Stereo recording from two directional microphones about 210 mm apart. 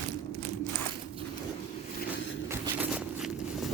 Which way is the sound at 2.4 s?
10° right (ahead or behind).